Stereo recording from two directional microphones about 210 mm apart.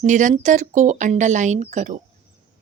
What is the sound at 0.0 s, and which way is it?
A woman's voice, 35° right (ahead or behind).